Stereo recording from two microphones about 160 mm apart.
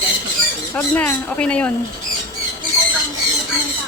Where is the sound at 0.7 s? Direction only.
10° left (ahead or behind).